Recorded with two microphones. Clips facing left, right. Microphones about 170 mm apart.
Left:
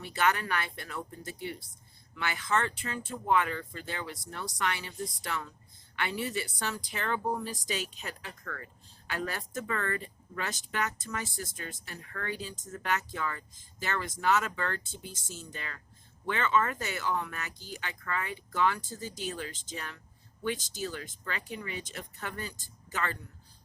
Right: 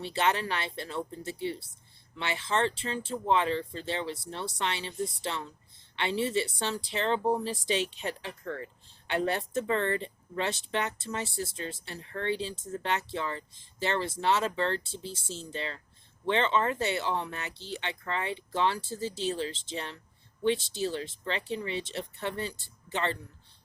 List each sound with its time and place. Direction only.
0.0 s speech: 25° right (ahead or behind)